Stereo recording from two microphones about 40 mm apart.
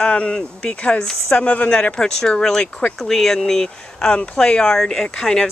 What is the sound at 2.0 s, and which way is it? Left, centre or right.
Speech, centre.